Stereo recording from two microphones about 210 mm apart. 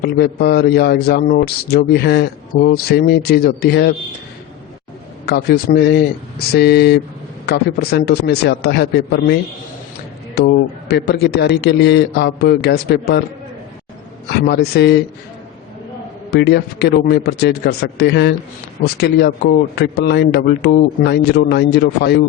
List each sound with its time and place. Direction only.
0.0 s a man's voice: 50° left (ahead or behind)
5.2 s a man's voice: 50° left (ahead or behind)
14.3 s a man's voice: 50° left (ahead or behind)
16.3 s a man's voice: 50° left (ahead or behind)